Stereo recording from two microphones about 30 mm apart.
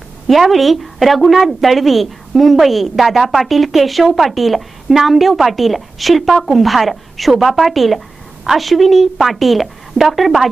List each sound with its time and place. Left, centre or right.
0.3 s a woman's voice: centre